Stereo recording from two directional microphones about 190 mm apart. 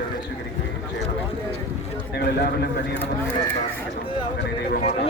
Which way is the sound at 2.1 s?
60° left (ahead or behind).